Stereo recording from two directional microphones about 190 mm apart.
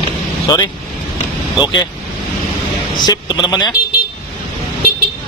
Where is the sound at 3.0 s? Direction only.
25° left (ahead or behind).